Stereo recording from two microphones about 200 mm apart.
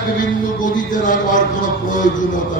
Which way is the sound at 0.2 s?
40° left (ahead or behind).